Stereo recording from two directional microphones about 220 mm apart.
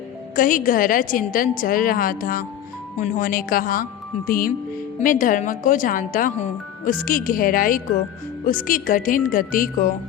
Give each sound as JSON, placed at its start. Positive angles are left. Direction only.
{"t": 0.3, "sound": "speech", "side_deg": 40}